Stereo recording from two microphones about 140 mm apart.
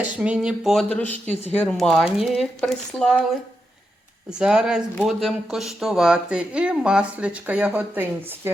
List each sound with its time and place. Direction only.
0.0 s speech: 5° right (ahead or behind)
4.3 s speech: 5° right (ahead or behind)